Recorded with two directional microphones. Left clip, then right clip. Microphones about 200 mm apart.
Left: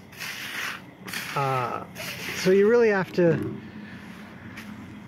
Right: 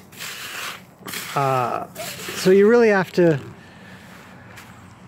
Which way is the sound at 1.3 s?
50° right (ahead or behind).